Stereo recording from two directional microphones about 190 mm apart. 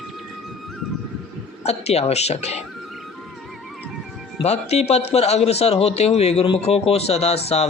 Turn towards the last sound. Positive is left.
turn(degrees=35)  # may be behind; listen again after turning